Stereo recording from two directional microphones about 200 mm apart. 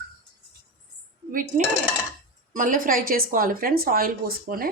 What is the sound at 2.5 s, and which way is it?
Speech, 40° right (ahead or behind).